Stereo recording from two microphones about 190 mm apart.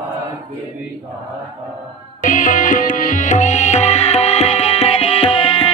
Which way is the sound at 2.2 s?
45° left (ahead or behind).